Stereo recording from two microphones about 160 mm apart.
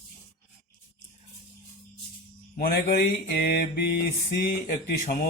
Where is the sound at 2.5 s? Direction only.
70° left (ahead or behind).